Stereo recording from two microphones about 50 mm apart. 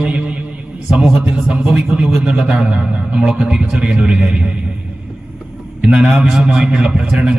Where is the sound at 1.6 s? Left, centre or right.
Centre.